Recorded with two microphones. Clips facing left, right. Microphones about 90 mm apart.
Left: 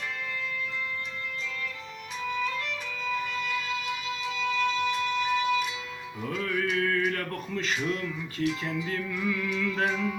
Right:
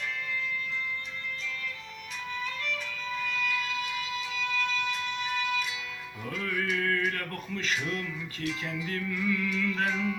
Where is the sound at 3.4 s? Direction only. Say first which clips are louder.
Even; 25° left (ahead or behind).